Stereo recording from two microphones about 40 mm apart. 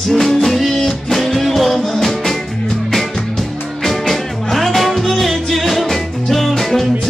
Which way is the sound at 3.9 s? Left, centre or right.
Centre.